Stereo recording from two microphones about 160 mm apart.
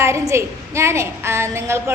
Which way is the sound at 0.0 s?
15° right (ahead or behind).